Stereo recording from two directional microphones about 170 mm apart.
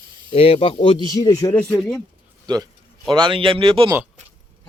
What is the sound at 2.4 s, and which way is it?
Speech, 25° right (ahead or behind).